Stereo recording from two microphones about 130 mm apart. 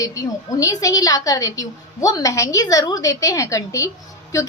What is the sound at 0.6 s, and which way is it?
A woman's voice, 25° left (ahead or behind).